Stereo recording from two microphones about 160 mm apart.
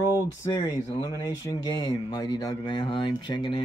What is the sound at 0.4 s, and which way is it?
Speech, 20° left (ahead or behind).